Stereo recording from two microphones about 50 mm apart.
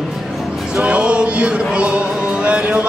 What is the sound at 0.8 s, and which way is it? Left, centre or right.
Music, right.